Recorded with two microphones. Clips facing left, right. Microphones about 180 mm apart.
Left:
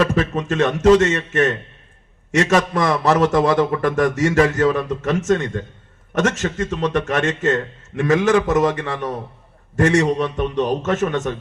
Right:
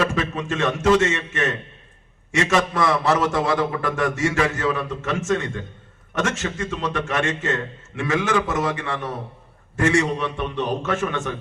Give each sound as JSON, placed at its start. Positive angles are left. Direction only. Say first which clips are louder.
{"t": 0.1, "sound": "a man's voice", "louder": "left 5 dB", "side_deg": 40}